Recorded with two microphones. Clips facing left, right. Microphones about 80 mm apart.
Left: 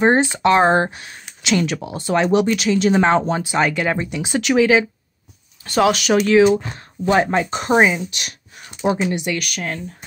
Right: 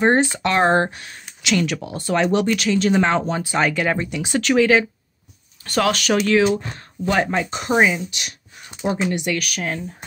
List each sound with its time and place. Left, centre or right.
0.0 s speech: centre
3.5 s speech: centre
4.1 s speech: centre
7.2 s speech: left
8.1 s speech: left
9.0 s speech: centre
9.3 s speech: centre